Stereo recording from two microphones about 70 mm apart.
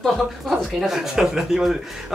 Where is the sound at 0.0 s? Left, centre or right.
Centre.